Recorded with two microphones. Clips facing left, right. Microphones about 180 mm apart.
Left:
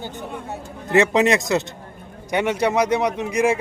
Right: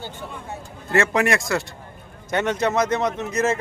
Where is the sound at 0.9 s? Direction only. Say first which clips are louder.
Left 3 dB; 20° left (ahead or behind).